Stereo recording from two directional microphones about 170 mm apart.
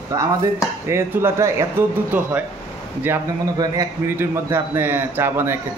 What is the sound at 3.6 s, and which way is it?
A man's voice, 15° right (ahead or behind).